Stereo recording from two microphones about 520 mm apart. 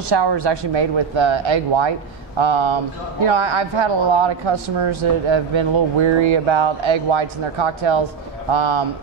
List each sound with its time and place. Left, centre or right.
0.1 s speech: right